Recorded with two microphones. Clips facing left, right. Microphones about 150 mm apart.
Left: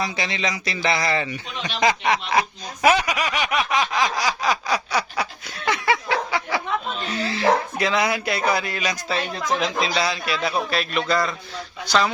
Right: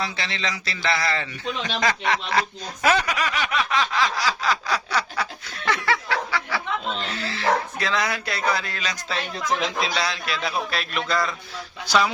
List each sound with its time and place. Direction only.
0.0 s speech: 15° left (ahead or behind); by 12.1 s 5° right (ahead or behind)